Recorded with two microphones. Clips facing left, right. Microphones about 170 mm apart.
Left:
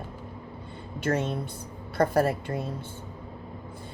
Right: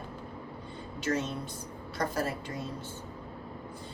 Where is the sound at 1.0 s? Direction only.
55° left (ahead or behind).